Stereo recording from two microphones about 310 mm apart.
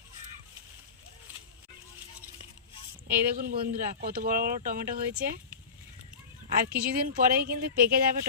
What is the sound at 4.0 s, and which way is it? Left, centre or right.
Speech, right.